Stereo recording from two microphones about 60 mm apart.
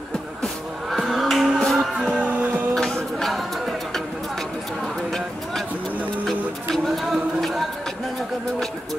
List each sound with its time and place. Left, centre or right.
0.9 s music: centre
2.1 s music: right
2.7 s music: centre
6.2 s music: centre